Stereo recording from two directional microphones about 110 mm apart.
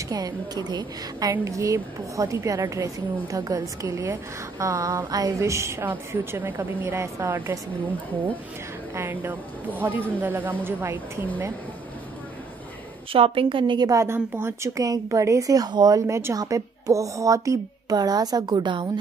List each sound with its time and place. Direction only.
0.1 s a woman's voice: 35° right (ahead or behind)
8.9 s a woman's voice: 20° right (ahead or behind)
13.1 s a woman's voice: 55° right (ahead or behind)
13.8 s a woman's voice: 25° right (ahead or behind); by 18.9 s 45° right (ahead or behind)